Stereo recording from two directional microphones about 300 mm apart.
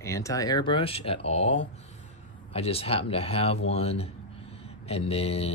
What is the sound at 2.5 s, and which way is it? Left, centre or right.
Speech, centre.